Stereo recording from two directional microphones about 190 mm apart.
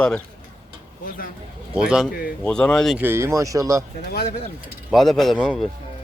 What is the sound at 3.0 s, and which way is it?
Speech, 10° right (ahead or behind).